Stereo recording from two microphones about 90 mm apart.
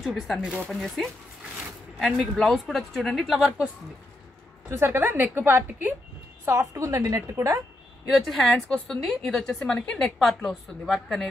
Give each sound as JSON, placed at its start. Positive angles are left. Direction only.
{"t": 0.0, "sound": "a woman's voice", "side_deg": 0}
{"t": 4.6, "sound": "a woman's voice", "side_deg": -30}
{"t": 6.4, "sound": "a woman's voice", "side_deg": -35}
{"t": 8.1, "sound": "a woman's voice", "side_deg": 0}